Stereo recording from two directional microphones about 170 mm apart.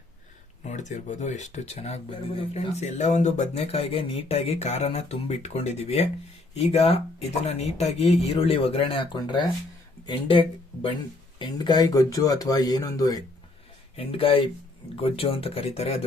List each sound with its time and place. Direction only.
0.7 s speech: 45° left (ahead or behind); by 13.2 s 20° left (ahead or behind)
13.9 s speech: 35° left (ahead or behind)